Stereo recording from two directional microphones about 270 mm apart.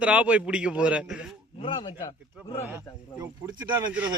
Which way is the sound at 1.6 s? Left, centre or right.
Centre.